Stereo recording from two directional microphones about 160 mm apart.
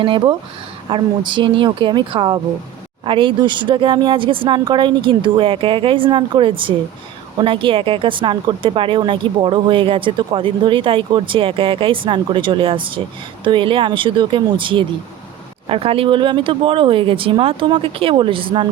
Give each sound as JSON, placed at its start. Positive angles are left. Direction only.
{"t": 0.0, "sound": "speech", "side_deg": -30}